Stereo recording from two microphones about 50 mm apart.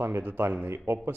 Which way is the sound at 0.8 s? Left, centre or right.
Right.